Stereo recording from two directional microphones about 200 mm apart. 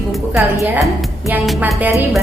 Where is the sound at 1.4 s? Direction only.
5° right (ahead or behind).